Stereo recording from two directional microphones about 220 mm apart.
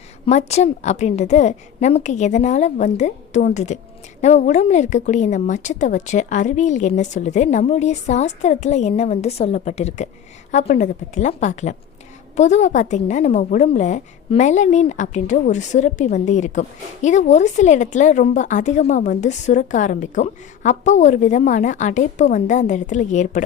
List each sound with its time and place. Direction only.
0.3 s a woman's voice: 30° left (ahead or behind)